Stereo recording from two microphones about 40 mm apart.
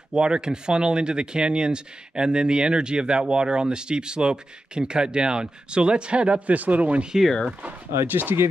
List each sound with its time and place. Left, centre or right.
0.1 s speech: right
6.5 s speech: right
7.9 s speech: right